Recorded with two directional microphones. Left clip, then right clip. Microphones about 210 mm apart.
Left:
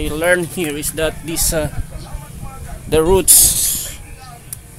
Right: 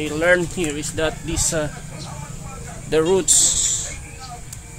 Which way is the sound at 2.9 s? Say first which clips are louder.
Left 4 dB; 30° left (ahead or behind).